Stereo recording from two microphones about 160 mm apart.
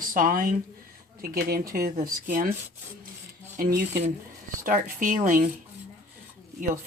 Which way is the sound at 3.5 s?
65° right (ahead or behind).